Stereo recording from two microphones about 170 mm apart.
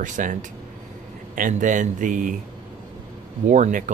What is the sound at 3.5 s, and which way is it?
Speech, 50° right (ahead or behind).